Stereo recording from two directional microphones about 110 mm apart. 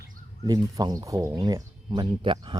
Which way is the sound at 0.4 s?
40° right (ahead or behind).